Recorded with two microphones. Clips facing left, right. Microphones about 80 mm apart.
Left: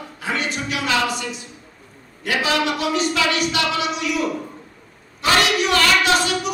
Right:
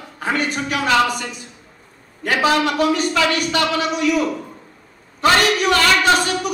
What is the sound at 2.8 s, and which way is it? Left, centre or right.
A woman's voice, right.